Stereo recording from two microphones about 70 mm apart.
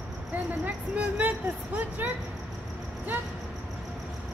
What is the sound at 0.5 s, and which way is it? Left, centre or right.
Female singing, right.